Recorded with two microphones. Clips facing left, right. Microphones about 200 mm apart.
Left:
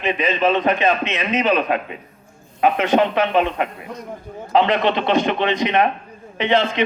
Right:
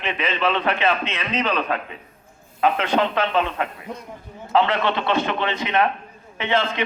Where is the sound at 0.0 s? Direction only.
15° left (ahead or behind).